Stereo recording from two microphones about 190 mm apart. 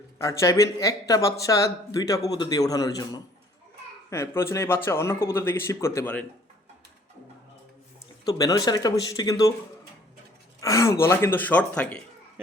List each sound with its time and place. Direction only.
0.2 s speech: 15° left (ahead or behind)
8.2 s speech: 20° left (ahead or behind)
10.6 s speech: 15° left (ahead or behind)